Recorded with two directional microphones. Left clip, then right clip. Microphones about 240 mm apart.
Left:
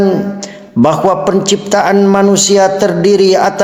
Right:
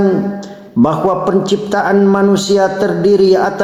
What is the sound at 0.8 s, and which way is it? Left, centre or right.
Speech, left.